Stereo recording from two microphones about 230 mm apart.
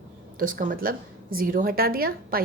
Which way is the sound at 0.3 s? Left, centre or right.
Right.